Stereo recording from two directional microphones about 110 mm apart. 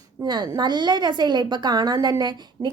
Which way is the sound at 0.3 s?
40° right (ahead or behind).